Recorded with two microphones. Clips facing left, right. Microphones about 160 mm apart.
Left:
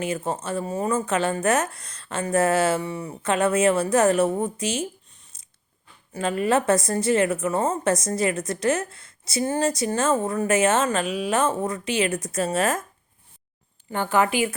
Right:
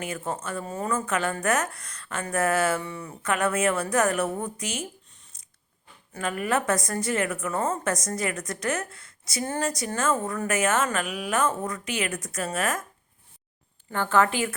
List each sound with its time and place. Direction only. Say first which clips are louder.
0.0 s a woman's voice: left 5 dB; 25° left (ahead or behind)
6.1 s a woman's voice: left 5 dB; 25° left (ahead or behind)
13.9 s a woman's voice: left 1 dB; 15° left (ahead or behind)